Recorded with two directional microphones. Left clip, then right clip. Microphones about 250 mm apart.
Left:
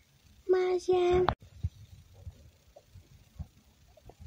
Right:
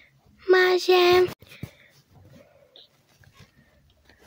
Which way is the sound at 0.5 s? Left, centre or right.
Centre.